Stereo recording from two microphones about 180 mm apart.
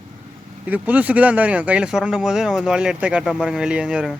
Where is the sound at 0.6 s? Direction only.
10° right (ahead or behind).